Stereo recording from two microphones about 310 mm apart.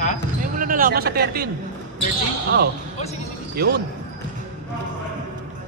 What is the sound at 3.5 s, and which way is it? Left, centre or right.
Speech, right.